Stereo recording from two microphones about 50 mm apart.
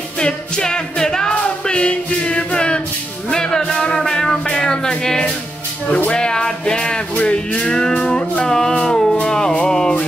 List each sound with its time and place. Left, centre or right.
0.2 s music: centre
8.5 s music: centre